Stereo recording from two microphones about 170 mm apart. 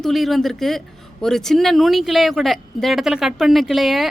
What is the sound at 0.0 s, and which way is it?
A woman's voice, centre (ahead or behind).